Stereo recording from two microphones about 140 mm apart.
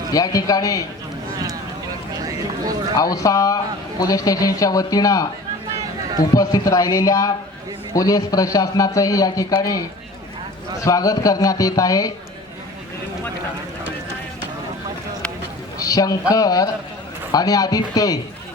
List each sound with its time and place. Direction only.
0.1 s a man's voice: 25° left (ahead or behind)
2.9 s a man's voice: 25° left (ahead or behind)
6.3 s a man's voice: 25° left (ahead or behind)
15.8 s a sound: 25° left (ahead or behind)
16.3 s a man's voice: 25° left (ahead or behind)